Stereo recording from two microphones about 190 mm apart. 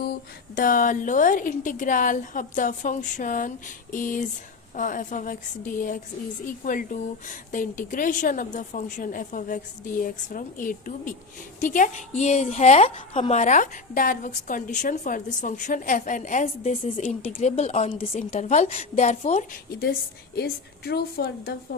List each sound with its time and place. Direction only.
0.5 s a woman's voice: 45° left (ahead or behind)
19.8 s a woman's voice: 55° left (ahead or behind)